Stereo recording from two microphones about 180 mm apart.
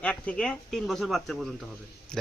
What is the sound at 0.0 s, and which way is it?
Speech, 5° left (ahead or behind).